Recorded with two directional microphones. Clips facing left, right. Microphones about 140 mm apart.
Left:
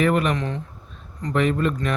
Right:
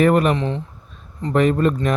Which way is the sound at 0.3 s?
25° right (ahead or behind).